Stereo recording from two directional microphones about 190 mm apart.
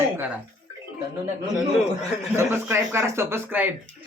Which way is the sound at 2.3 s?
10° right (ahead or behind).